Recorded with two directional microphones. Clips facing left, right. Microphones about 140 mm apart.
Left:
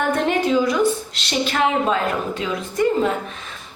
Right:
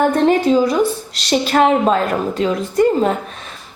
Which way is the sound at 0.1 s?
35° right (ahead or behind).